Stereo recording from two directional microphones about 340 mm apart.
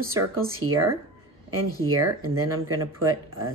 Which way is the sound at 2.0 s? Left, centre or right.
Right.